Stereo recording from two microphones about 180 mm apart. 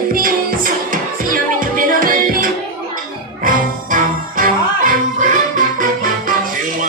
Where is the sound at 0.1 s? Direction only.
50° right (ahead or behind).